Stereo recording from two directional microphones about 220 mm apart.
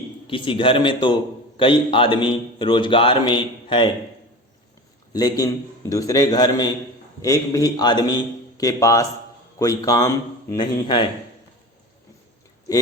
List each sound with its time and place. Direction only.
0.3 s a man's voice: 25° left (ahead or behind)
5.1 s a man's voice: 15° left (ahead or behind)